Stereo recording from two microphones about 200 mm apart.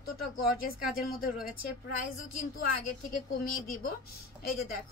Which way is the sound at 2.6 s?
45° left (ahead or behind).